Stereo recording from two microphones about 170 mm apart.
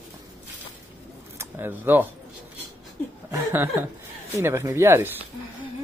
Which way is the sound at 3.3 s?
15° right (ahead or behind).